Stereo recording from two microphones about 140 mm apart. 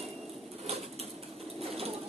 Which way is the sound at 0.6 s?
50° right (ahead or behind).